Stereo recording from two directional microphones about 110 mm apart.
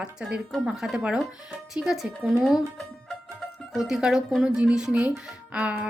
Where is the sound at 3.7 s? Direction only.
5° right (ahead or behind).